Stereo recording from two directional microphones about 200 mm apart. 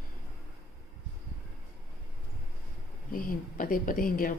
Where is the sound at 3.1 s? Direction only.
45° left (ahead or behind).